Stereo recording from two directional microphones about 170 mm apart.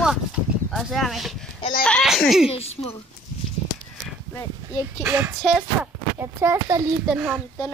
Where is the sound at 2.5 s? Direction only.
35° left (ahead or behind).